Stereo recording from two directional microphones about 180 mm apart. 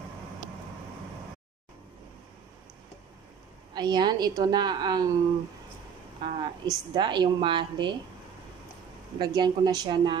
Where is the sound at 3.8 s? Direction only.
25° right (ahead or behind).